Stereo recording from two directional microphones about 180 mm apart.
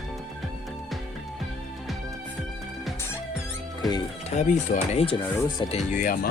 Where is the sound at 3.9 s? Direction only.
40° left (ahead or behind).